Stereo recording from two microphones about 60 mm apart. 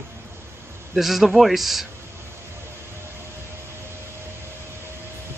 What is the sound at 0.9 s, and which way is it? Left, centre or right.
Speech, centre.